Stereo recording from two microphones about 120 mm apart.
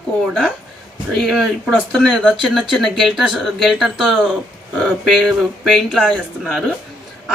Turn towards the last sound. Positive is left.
turn(degrees=0)  # may be behind; listen again after turning